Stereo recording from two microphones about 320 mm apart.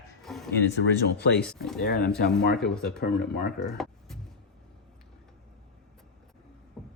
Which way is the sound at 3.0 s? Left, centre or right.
Left.